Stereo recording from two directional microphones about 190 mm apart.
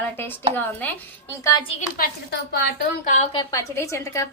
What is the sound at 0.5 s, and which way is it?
Speech, 10° left (ahead or behind).